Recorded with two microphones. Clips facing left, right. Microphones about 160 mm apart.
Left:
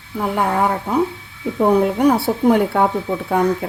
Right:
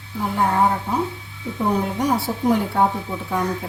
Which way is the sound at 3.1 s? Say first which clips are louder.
Left 7 dB; 80° left.